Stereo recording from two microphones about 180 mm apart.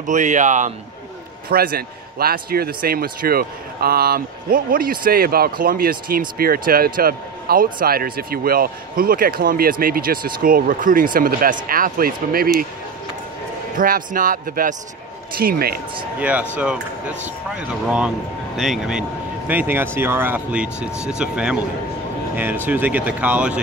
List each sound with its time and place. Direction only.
0.0 s speech: 45° right (ahead or behind)
1.5 s a man's voice: 55° right (ahead or behind)
13.7 s a man's voice: 50° right (ahead or behind)
16.2 s speech: 10° right (ahead or behind)